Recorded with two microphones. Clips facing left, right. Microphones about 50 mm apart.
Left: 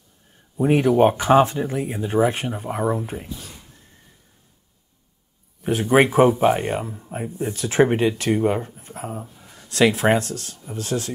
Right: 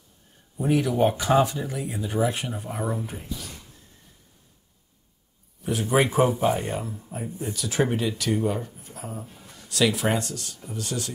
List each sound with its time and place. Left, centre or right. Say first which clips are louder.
0.6 s speech: left 6 dB; left
2.9 s speech: left 6 dB; centre
5.6 s speech: left 6 dB; left